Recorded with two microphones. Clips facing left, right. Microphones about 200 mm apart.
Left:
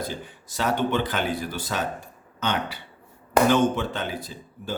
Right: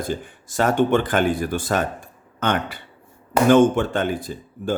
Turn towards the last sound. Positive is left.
turn(degrees=-50)  # may be behind; listen again after turning